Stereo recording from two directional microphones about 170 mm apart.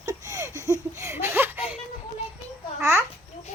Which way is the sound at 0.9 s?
15° right (ahead or behind).